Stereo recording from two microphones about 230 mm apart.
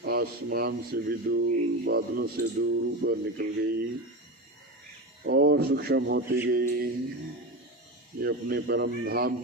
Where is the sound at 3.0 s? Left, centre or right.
Right.